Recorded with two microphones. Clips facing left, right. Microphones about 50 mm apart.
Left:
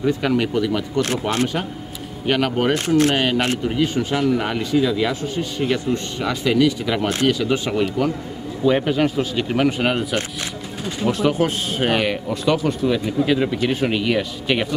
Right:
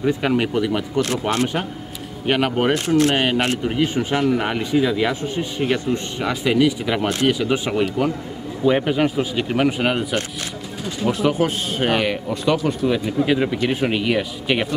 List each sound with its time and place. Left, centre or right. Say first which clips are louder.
0.0 s speech: even; right; by 10.0 s centre
11.1 s speech: even; centre
12.6 s speech: even; centre